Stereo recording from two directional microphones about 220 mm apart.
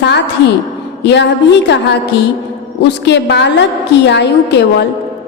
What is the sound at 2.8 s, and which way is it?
A woman's voice, 50° left (ahead or behind).